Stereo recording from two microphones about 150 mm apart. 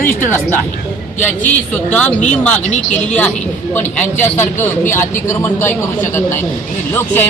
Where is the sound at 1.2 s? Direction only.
10° left (ahead or behind).